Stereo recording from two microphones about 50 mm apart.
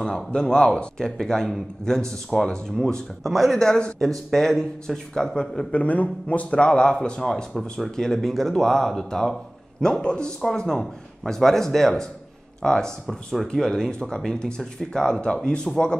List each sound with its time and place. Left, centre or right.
0.0 s a man's voice: centre
2.8 s speech: centre
3.6 s a man's voice: centre
5.7 s a man's voice: left
7.2 s a man's voice: centre